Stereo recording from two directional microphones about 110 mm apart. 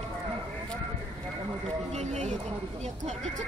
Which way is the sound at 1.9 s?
90° right.